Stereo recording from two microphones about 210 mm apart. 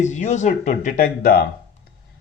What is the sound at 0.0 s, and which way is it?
Speech, 35° left (ahead or behind).